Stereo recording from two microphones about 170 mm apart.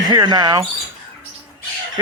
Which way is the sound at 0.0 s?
25° right (ahead or behind).